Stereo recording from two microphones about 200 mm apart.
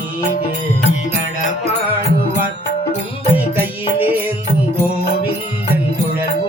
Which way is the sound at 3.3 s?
10° right (ahead or behind).